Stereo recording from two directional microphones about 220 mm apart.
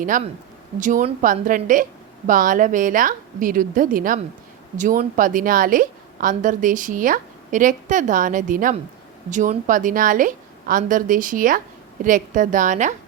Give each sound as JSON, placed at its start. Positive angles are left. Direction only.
{"t": 0.0, "sound": "a woman's voice", "side_deg": -35}